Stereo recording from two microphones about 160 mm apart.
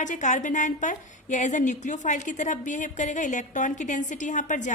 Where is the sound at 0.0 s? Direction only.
50° left (ahead or behind).